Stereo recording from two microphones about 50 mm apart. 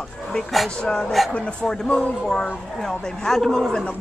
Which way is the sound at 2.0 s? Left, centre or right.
Centre.